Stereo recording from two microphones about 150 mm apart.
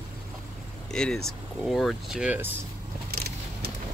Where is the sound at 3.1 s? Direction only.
90° right.